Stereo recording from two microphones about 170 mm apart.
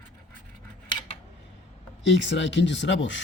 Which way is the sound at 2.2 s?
90° left.